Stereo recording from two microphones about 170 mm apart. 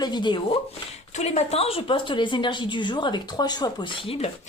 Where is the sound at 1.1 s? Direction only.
40° left (ahead or behind).